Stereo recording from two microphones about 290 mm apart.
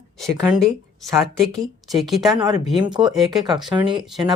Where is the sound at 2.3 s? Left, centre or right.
Centre.